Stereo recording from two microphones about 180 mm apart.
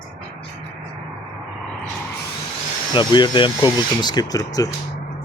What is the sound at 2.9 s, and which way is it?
Speech, 25° left (ahead or behind).